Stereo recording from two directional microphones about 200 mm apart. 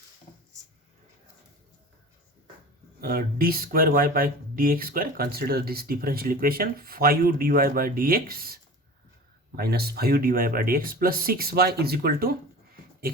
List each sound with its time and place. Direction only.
3.0 s speech: 50° right (ahead or behind)